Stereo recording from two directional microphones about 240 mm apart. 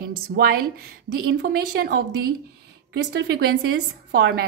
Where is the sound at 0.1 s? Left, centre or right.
Right.